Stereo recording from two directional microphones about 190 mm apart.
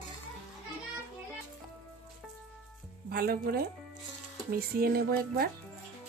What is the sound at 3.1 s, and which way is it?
Speech, 55° right (ahead or behind).